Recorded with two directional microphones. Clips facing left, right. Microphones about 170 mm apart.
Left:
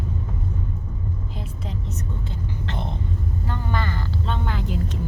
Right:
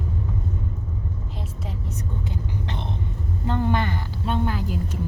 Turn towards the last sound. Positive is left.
turn(degrees=-5)  # may be behind; listen again after turning